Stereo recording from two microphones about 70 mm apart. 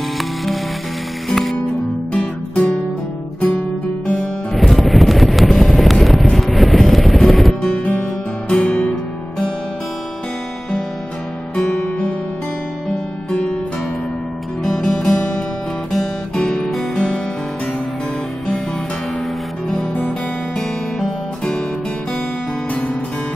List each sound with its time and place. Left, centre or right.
1.3 s music: centre
2.1 s music: left
4.6 s music: centre
7.7 s guitar: centre
11.5 s music: centre
13.3 s music: centre
14.6 s music: centre
15.9 s guitar: centre
20.5 s music: centre